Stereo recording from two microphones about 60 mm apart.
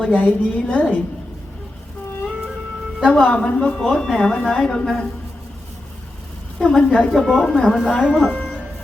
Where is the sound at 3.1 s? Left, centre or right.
Centre.